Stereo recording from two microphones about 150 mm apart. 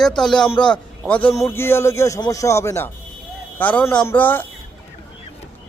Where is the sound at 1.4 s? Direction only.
20° left (ahead or behind).